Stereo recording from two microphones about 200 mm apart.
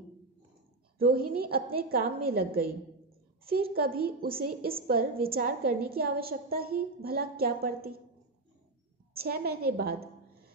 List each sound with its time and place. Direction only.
0.9 s a woman's voice: 50° right (ahead or behind)
3.7 s a woman's voice: 50° right (ahead or behind)
9.1 s a woman's voice: 50° right (ahead or behind)